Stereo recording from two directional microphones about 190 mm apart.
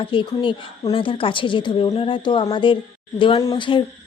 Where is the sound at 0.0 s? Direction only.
25° left (ahead or behind).